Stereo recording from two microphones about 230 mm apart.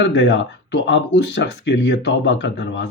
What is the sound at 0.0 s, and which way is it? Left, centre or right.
Speech, left.